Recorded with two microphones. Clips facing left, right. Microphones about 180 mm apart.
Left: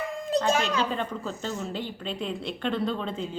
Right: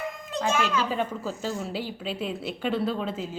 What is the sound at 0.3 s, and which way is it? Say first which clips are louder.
Speech: left 2 dB; 35° left (ahead or behind).